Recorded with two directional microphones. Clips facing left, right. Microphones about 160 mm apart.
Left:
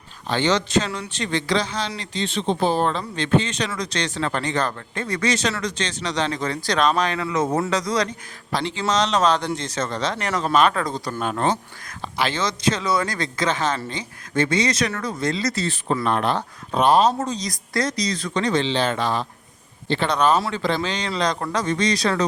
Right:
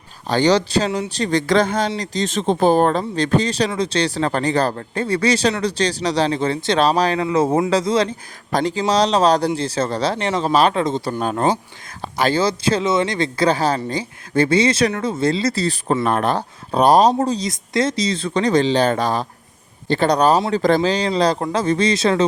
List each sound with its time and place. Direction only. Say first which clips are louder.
0.3 s a man's voice: right 5 dB; 40° right (ahead or behind)
8.5 s a man's voice: right 5 dB; 40° right (ahead or behind); by 11.2 s 25° right (ahead or behind)
11.2 s a man's voice: right 2 dB; 40° right (ahead or behind)